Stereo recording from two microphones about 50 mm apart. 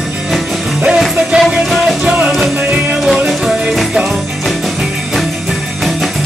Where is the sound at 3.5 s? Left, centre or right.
Centre.